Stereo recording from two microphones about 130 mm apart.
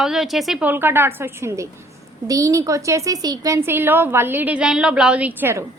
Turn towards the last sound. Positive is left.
turn(degrees=-15)  # may be behind; listen again after turning